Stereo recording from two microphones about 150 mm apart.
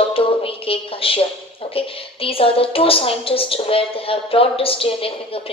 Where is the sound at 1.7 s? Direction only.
40° left (ahead or behind).